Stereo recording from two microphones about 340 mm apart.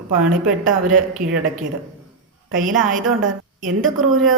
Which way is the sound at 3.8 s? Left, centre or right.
Right.